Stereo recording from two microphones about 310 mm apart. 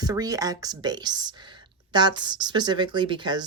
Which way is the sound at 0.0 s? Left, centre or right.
Centre.